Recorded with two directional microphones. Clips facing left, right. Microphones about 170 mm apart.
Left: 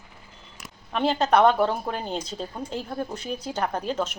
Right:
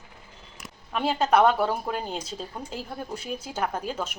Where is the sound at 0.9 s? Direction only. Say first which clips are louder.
Left 1 dB; 5° right (ahead or behind).